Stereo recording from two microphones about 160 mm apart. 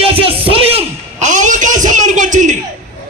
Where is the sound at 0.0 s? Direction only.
35° right (ahead or behind).